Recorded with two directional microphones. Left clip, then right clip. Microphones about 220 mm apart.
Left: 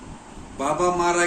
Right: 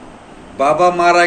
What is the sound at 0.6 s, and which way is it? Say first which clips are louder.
Speech: right 10 dB; 15° left (ahead or behind).